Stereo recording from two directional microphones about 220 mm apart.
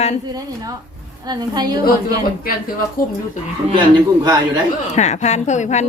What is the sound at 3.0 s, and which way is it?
Speech, 40° left (ahead or behind).